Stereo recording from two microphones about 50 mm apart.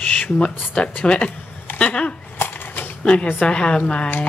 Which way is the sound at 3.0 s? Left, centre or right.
Left.